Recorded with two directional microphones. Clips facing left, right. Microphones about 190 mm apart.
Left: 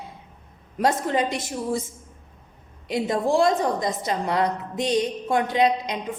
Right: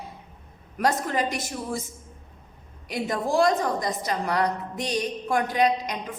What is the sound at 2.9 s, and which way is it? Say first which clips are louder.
A woman's voice: left 4 dB; 25° left (ahead or behind).